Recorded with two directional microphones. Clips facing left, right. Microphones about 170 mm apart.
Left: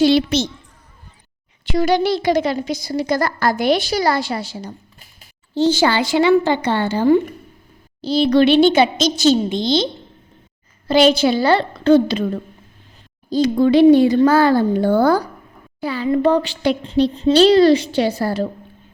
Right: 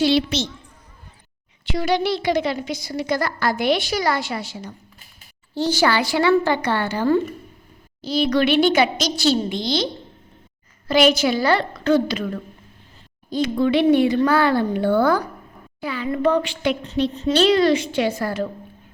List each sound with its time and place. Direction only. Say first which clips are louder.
0.0 s a woman's voice: left 4 dB; 45° left (ahead or behind)
1.6 s a woman's voice: left 4 dB; 45° left (ahead or behind)
5.5 s a woman's voice: left 4 dB; 25° left (ahead or behind)
13.3 s a woman's voice: left 5 dB; 35° left (ahead or behind)